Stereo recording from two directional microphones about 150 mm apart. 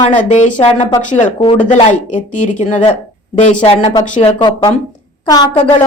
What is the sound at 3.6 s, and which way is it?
Speech, 40° left (ahead or behind).